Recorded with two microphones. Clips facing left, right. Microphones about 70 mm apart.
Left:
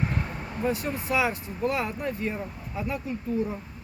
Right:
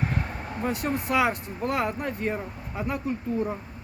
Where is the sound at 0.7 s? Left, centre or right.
Right.